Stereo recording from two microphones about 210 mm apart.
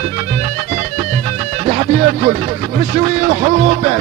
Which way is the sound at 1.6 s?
40° right (ahead or behind).